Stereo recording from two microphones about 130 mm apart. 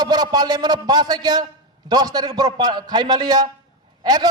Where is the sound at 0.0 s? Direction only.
30° right (ahead or behind).